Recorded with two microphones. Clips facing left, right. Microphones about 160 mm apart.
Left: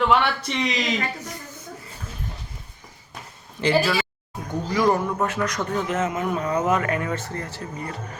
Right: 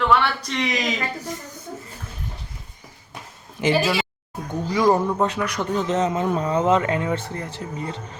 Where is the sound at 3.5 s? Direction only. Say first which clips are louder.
Even; 20° right (ahead or behind).